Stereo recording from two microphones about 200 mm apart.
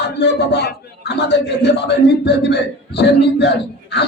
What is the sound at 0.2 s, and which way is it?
Speech, 55° left (ahead or behind).